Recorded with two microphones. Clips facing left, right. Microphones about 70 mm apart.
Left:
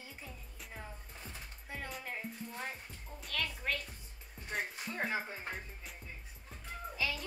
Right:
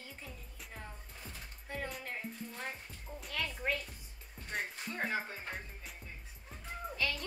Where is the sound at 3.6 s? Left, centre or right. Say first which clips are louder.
Right 3 dB; right.